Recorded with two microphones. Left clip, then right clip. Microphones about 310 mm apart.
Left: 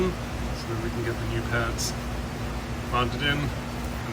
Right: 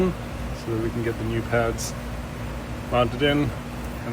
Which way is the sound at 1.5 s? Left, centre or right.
Centre.